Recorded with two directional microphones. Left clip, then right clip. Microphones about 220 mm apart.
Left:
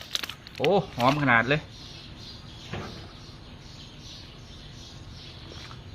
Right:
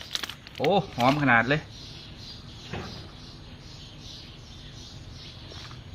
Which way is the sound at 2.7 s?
50° left (ahead or behind).